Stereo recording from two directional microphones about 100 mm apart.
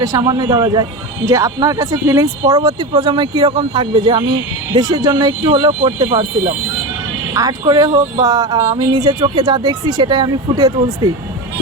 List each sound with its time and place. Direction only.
0.0 s speech: 40° right (ahead or behind)
3.0 s speech: 45° right (ahead or behind)
7.3 s speech: 40° right (ahead or behind)